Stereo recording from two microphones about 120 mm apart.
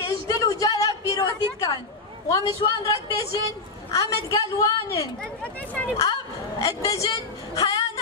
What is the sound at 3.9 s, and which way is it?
A woman's voice, 25° left (ahead or behind).